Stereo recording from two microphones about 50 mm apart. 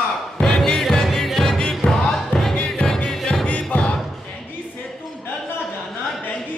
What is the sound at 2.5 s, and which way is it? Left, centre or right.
Music, centre.